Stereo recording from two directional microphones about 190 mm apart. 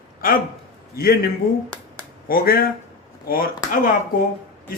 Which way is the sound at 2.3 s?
50° left (ahead or behind).